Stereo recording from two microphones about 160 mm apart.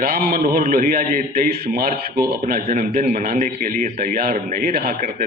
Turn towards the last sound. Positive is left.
turn(degrees=-70)  # may be behind; listen again after turning